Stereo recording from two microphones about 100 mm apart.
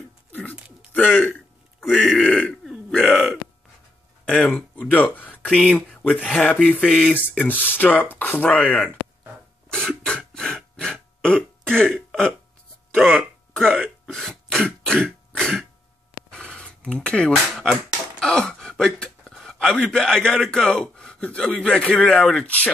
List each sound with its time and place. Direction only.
0.3 s a sound: 15° left (ahead or behind)
0.6 s a sound: 15° right (ahead or behind)
0.9 s a man's voice: 15° left (ahead or behind)
1.2 s speech: centre (ahead or behind)
2.6 s burping: 5° left (ahead or behind)
4.3 s speech: 10° left (ahead or behind)
6.9 s speech: centre (ahead or behind)
7.2 s speech: 20° left (ahead or behind)
9.7 s throat clearing: 10° left (ahead or behind)
12.1 s speech: centre (ahead or behind)
13.5 s hiccup: 5° left (ahead or behind)
14.0 s throat clearing: 5° left (ahead or behind)
16.3 s a sound: 10° left (ahead or behind)
18.2 s speech: 5° left (ahead or behind)